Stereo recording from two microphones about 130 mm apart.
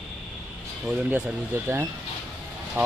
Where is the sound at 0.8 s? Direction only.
10° right (ahead or behind).